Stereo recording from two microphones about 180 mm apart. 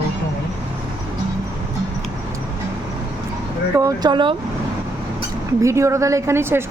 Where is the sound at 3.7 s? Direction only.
20° right (ahead or behind).